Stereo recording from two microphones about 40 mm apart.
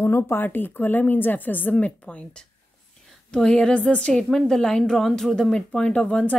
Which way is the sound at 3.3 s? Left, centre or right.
Centre.